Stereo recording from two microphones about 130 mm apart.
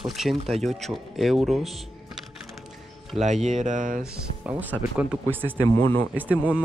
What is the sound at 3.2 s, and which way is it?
Speech, 65° right (ahead or behind).